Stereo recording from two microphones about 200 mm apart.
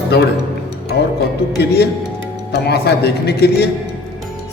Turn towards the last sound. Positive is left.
turn(degrees=55)  # may be behind; listen again after turning